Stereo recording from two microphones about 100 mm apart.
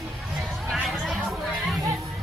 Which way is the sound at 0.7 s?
Centre (ahead or behind).